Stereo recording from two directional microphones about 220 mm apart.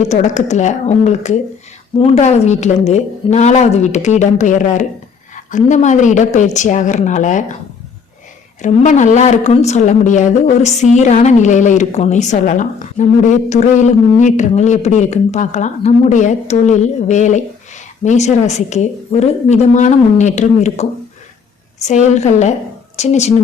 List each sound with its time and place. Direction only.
0.1 s a woman's voice: 30° left (ahead or behind)
8.6 s a woman's voice: 35° left (ahead or behind)